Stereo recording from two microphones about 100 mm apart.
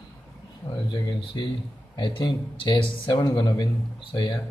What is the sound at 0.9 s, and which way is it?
Speech, 50° left (ahead or behind).